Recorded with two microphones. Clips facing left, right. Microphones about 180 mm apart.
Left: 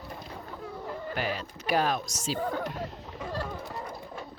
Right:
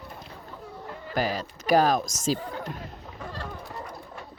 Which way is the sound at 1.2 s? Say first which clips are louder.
Right 8 dB; 40° right (ahead or behind).